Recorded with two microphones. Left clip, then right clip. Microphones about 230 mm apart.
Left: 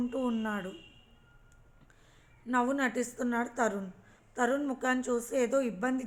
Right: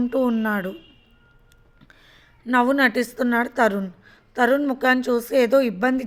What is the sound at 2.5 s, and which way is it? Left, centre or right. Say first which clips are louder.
A woman's voice: right 12 dB; right.